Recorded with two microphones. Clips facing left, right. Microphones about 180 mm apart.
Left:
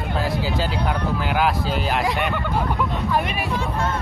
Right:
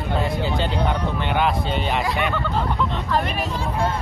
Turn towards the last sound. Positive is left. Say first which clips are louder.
# even
turn(degrees=-30)  # may be behind; listen again after turning